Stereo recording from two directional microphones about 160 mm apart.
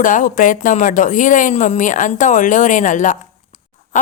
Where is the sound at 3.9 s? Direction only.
55° left (ahead or behind).